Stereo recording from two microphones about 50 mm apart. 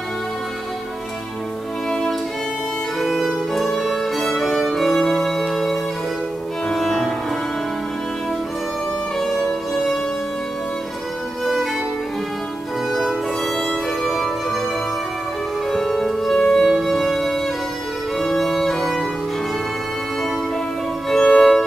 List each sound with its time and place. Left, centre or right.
3.0 s music: centre
9.2 s music: centre
13.6 s violin: centre
14.1 s music: centre
15.7 s music: centre
21.1 s violin: centre